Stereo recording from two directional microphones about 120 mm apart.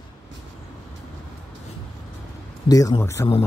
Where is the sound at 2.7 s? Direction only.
30° left (ahead or behind).